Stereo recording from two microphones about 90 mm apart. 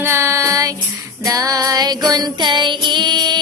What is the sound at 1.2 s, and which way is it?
Female singing, 40° right (ahead or behind).